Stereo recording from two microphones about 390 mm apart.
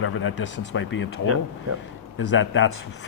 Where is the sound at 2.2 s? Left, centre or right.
Left.